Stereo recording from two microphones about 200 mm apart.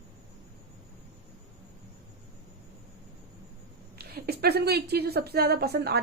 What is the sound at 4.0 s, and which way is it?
A woman's voice, 50° right (ahead or behind).